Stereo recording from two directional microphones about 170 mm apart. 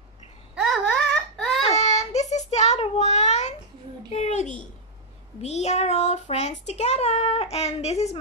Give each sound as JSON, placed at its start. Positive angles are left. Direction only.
{"t": 0.6, "sound": "baby cry", "side_deg": 0}
{"t": 1.7, "sound": "child singing", "side_deg": 40}
{"t": 4.1, "sound": "a sound", "side_deg": 40}
{"t": 5.4, "sound": "child singing", "side_deg": 40}